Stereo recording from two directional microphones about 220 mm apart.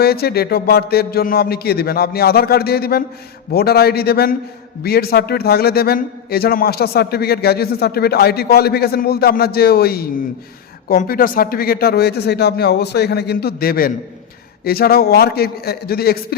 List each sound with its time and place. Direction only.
0.0 s a man's voice: 45° left (ahead or behind)